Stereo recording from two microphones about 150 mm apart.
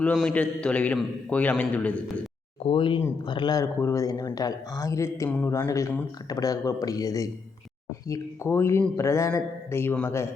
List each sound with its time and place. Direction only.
0.2 s speech: 5° left (ahead or behind)
2.6 s a man's voice: 35° left (ahead or behind); by 10.2 s 15° left (ahead or behind)